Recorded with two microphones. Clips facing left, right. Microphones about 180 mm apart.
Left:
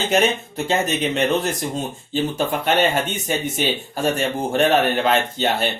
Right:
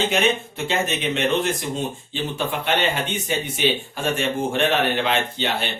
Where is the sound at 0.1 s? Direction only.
40° left (ahead or behind).